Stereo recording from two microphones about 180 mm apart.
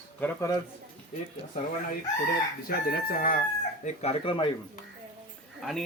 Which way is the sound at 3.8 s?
35° left (ahead or behind).